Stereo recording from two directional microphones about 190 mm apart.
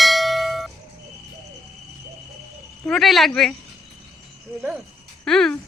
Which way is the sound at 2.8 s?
Centre (ahead or behind).